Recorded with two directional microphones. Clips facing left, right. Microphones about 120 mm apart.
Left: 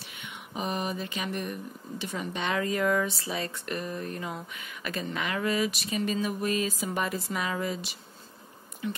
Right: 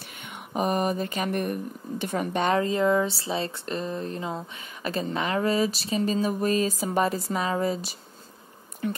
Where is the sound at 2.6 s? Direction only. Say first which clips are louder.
Right 1 dB; 25° right (ahead or behind).